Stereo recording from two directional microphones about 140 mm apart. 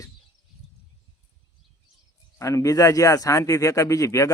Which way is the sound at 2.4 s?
25° left (ahead or behind).